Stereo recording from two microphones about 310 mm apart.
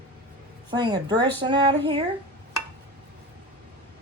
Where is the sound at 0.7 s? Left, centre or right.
Centre.